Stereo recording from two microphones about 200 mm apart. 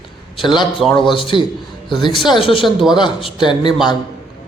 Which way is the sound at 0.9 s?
25° left (ahead or behind).